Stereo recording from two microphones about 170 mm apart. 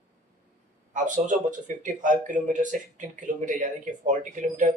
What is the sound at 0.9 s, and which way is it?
Speech, 50° right (ahead or behind).